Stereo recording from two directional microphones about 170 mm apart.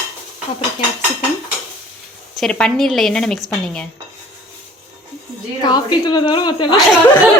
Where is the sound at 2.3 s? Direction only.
5° left (ahead or behind).